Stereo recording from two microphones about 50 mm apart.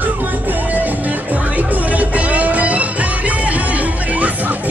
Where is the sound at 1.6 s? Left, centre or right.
Right.